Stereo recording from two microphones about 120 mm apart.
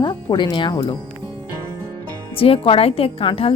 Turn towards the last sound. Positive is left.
turn(degrees=50)  # may be behind; listen again after turning